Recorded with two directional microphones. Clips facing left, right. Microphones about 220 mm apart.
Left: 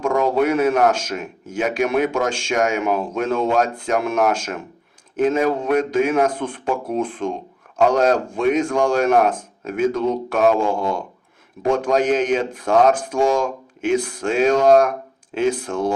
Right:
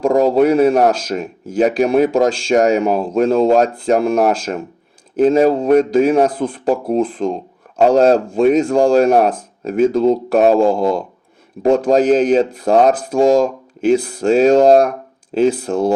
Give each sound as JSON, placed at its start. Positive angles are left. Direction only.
{"t": 0.0, "sound": "speech", "side_deg": -35}